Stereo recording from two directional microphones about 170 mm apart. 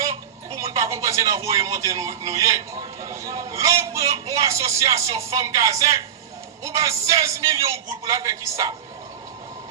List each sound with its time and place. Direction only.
0.5 s speech: 20° right (ahead or behind)